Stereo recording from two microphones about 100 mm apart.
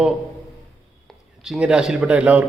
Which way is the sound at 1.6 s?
10° right (ahead or behind).